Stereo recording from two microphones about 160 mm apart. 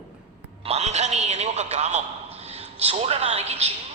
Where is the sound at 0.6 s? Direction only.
40° right (ahead or behind).